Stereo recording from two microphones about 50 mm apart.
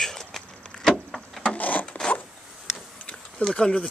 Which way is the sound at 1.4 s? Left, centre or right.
Left.